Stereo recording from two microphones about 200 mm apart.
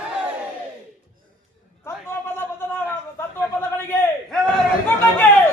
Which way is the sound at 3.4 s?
10° left (ahead or behind).